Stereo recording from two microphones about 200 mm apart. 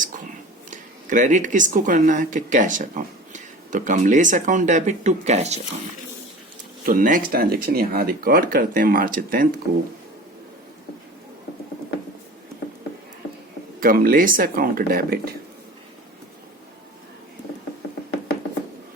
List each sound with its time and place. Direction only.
0.7 s speech: 40° right (ahead or behind)
6.8 s speech: 45° right (ahead or behind)
13.7 s speech: 45° right (ahead or behind)